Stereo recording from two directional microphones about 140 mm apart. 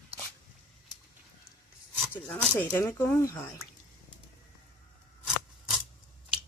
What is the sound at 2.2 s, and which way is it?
Speech, 10° left (ahead or behind).